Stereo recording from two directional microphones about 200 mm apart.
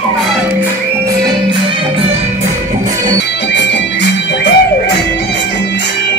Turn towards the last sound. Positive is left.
turn(degrees=60)  # may be behind; listen again after turning